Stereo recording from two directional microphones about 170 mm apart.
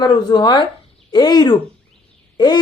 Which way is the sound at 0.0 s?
25° left (ahead or behind).